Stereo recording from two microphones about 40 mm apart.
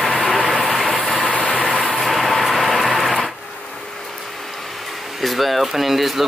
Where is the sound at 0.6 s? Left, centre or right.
Centre.